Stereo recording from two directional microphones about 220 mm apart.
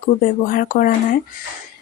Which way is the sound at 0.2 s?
40° left (ahead or behind).